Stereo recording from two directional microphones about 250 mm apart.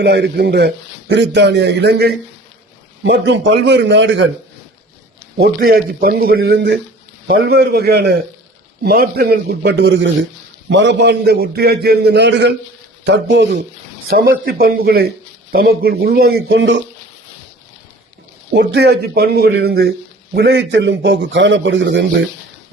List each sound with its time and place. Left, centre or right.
0.0 s a man's voice: right
5.4 s a man's voice: right
18.5 s a man's voice: right